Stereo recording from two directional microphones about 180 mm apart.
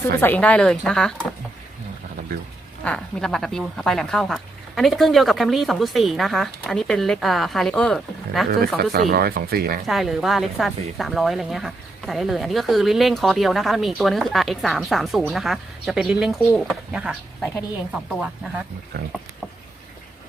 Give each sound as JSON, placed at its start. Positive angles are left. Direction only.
{"t": 0.2, "sound": "speech", "side_deg": 10}
{"t": 2.8, "sound": "speech", "side_deg": 5}
{"t": 8.4, "sound": "speech", "side_deg": -55}
{"t": 9.8, "sound": "speech", "side_deg": 0}